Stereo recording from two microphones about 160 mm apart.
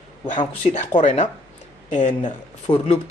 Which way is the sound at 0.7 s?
45° left (ahead or behind).